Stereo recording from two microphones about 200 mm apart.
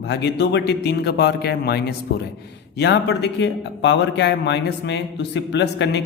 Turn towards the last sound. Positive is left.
turn(degrees=60)  # may be behind; listen again after turning